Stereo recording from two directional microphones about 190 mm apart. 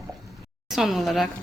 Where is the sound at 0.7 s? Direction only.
Centre (ahead or behind).